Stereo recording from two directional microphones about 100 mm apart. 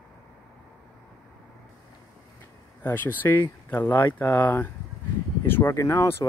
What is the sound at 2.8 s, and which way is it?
Speech, 20° left (ahead or behind).